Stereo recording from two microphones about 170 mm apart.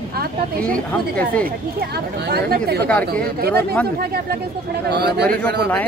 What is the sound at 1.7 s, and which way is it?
Speech, 70° right (ahead or behind).